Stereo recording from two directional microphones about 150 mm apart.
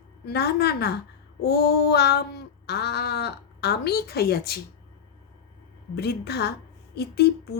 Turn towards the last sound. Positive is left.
turn(degrees=90)